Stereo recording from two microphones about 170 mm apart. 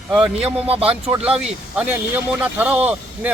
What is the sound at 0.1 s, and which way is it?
A man's voice, 5° right (ahead or behind).